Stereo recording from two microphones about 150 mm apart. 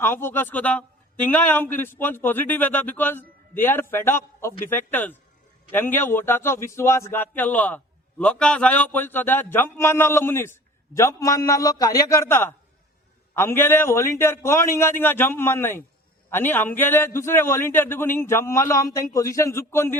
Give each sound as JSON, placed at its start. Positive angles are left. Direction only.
{"t": 0.0, "sound": "a man's voice", "side_deg": 15}